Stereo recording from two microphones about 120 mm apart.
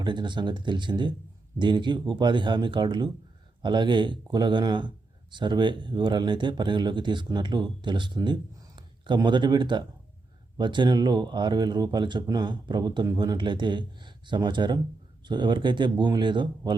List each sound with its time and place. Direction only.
0.0 s speech: 40° right (ahead or behind)